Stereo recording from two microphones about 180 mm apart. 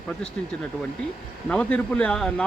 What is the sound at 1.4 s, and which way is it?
Speech, 5° left (ahead or behind).